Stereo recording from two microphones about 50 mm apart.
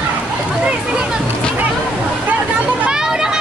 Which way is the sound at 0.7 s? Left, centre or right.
Right.